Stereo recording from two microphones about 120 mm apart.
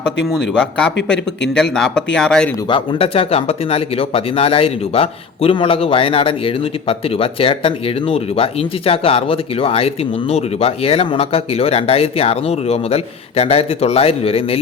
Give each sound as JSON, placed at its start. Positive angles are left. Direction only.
{"t": 0.6, "sound": "speech", "side_deg": 5}
{"t": 2.6, "sound": "speech", "side_deg": 50}